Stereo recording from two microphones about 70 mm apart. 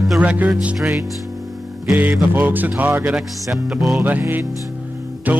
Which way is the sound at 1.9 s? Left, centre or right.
Right.